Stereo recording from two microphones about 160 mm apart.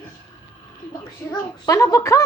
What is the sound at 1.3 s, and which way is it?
Speech, 20° left (ahead or behind).